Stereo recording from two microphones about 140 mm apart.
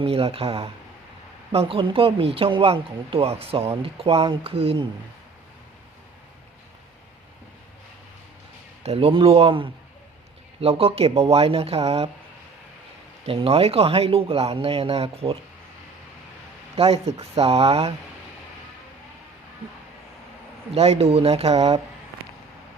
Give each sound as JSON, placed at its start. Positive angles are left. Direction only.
{"t": 0.0, "sound": "speech", "side_deg": -45}
{"t": 8.8, "sound": "speech", "side_deg": -45}
{"t": 13.2, "sound": "speech", "side_deg": -45}
{"t": 16.7, "sound": "speech", "side_deg": -45}
{"t": 20.7, "sound": "speech", "side_deg": -45}